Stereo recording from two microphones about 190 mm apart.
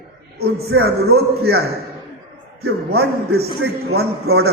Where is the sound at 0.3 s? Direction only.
55° right (ahead or behind).